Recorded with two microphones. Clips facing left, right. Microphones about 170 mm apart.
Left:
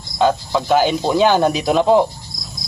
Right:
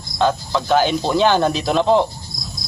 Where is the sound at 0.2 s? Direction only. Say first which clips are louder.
Left 2 dB; 10° left (ahead or behind).